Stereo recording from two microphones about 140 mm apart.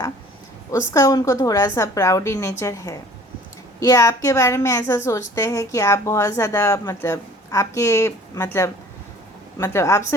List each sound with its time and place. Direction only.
0.7 s a woman's voice: 25° left (ahead or behind)